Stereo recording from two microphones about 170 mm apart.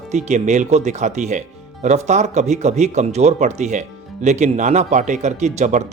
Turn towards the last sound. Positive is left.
turn(degrees=-45)  # may be behind; listen again after turning